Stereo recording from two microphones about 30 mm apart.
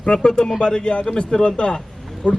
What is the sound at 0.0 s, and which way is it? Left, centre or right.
A man's voice, left.